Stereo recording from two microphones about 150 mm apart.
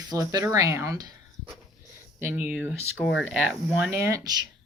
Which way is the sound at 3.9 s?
20° right (ahead or behind).